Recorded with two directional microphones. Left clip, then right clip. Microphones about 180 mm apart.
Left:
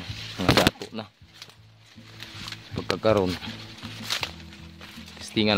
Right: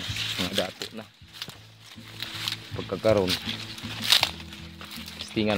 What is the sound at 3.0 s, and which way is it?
Speech, 25° left (ahead or behind).